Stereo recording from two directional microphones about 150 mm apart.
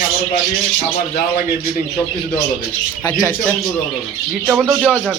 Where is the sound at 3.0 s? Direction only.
20° left (ahead or behind).